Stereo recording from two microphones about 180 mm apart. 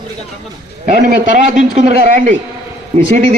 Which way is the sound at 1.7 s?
40° right (ahead or behind).